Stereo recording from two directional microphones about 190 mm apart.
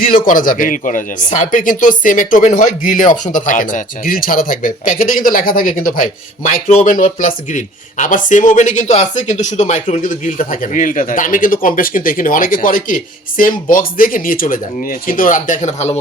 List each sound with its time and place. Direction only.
0.0 s speech: 45° left (ahead or behind)